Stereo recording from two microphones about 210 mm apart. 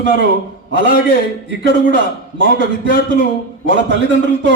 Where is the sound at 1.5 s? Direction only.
60° right (ahead or behind).